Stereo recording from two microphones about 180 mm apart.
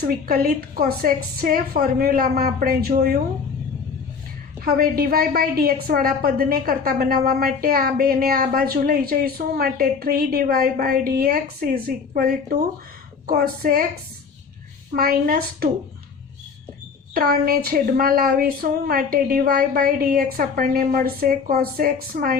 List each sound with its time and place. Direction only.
0.0 s a woman's voice: 55° right (ahead or behind)
4.6 s a woman's voice: 55° right (ahead or behind)
14.9 s a woman's voice: 55° right (ahead or behind)
17.2 s a woman's voice: 55° right (ahead or behind)